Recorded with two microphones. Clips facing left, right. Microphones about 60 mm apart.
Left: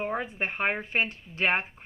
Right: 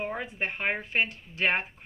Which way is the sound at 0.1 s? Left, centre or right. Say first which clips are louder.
Left 2 dB; left.